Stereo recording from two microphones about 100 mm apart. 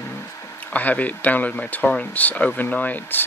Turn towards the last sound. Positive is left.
turn(degrees=15)  # may be behind; listen again after turning